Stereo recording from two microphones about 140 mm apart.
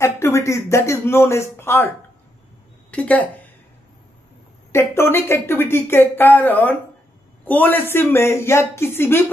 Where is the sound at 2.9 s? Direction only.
10° left (ahead or behind).